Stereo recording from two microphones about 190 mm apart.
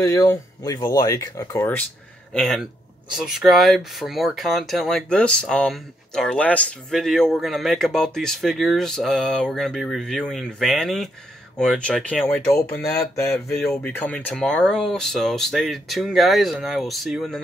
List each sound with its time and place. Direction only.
0.0 s speech: 15° left (ahead or behind)
2.3 s speech: centre (ahead or behind)